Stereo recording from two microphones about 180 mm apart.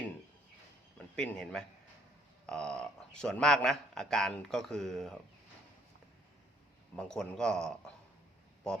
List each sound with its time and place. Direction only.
0.9 s a man's voice: 5° left (ahead or behind)
6.9 s a man's voice: 5° left (ahead or behind)